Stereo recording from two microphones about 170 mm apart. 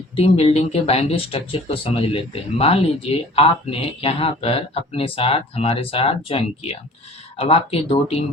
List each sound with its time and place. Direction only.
0.2 s speech: 35° left (ahead or behind)